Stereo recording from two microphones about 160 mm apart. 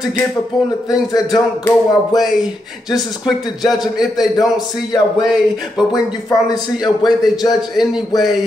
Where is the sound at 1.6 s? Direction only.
25° left (ahead or behind).